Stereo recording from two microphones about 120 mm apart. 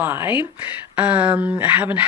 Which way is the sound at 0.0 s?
20° right (ahead or behind).